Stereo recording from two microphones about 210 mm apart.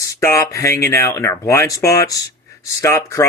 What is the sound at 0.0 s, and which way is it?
Speech, 15° left (ahead or behind).